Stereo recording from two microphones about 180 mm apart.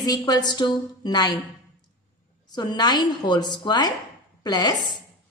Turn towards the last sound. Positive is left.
turn(degrees=20)  # may be behind; listen again after turning